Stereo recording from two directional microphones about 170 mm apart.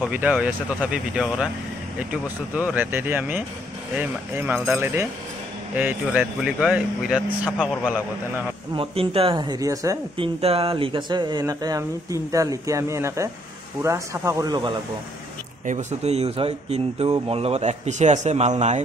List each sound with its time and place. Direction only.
0.0 s speech: 5° right (ahead or behind)
8.7 s speech: 35° right (ahead or behind)
10.1 s speech: 35° right (ahead or behind)
15.6 s speech: 45° right (ahead or behind)